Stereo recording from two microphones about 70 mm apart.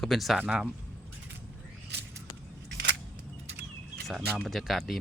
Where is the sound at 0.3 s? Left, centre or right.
Centre.